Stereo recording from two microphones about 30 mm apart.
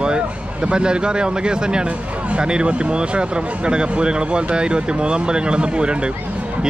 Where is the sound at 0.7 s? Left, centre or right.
Right.